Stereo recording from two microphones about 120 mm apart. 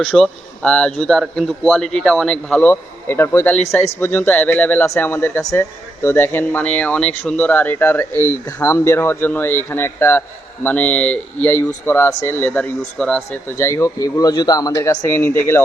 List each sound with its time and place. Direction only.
0.0 s a man's voice: 5° left (ahead or behind)
13.6 s a man's voice: 25° left (ahead or behind)